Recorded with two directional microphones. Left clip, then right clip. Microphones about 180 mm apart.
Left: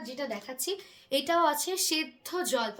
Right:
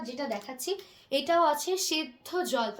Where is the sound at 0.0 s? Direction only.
25° left (ahead or behind).